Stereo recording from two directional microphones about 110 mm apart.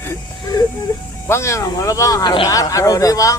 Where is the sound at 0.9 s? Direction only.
35° left (ahead or behind).